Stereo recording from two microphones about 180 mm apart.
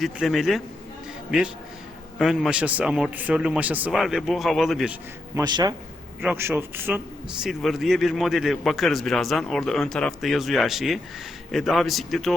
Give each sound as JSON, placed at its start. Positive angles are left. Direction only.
{"t": 0.0, "sound": "a man's voice", "side_deg": 0}
{"t": 2.1, "sound": "a man's voice", "side_deg": 0}
{"t": 5.3, "sound": "a man's voice", "side_deg": -25}
{"t": 6.2, "sound": "a man's voice", "side_deg": -10}